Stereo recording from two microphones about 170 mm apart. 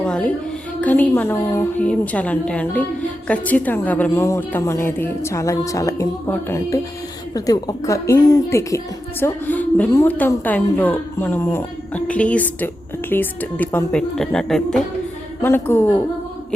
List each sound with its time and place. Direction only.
0.0 s a sound: 5° left (ahead or behind)
0.8 s a woman's voice: 10° left (ahead or behind)
15.4 s a woman's voice: 15° left (ahead or behind)